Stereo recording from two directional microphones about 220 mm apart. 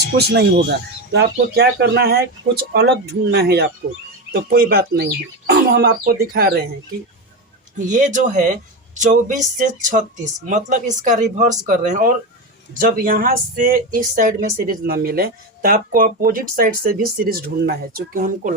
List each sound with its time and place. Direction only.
0.0 s speech: 50° right (ahead or behind)
7.8 s speech: 35° right (ahead or behind)